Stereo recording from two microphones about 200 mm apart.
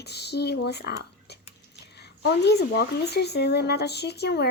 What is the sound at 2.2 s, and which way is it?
Speech, 55° left (ahead or behind).